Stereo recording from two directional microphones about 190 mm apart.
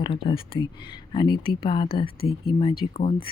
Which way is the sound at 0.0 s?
25° left (ahead or behind).